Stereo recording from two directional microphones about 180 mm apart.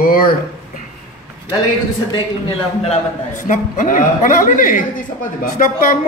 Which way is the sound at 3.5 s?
45° left (ahead or behind).